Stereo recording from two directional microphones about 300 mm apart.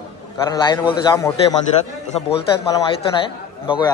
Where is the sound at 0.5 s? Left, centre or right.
Centre.